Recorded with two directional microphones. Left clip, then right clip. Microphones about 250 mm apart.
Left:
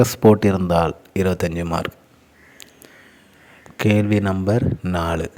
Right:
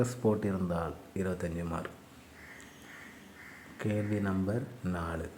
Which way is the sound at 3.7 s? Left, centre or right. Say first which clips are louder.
Left 16 dB; left.